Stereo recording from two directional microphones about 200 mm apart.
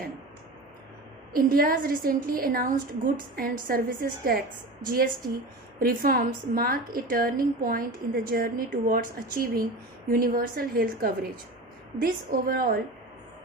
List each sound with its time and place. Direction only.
1.3 s a woman's voice: 45° right (ahead or behind)